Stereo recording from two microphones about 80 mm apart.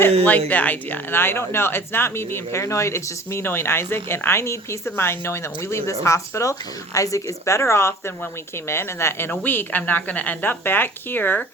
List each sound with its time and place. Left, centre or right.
0.0 s speech: centre